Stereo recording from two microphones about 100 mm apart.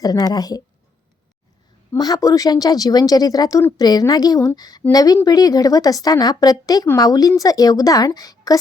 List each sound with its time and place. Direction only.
0.0 s speech: 40° left (ahead or behind)
2.0 s speech: 40° left (ahead or behind)